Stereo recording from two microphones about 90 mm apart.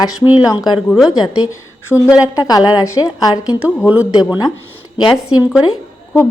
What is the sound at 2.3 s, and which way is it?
A woman's voice, 45° left (ahead or behind).